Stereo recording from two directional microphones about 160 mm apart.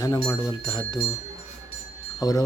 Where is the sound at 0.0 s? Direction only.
20° left (ahead or behind).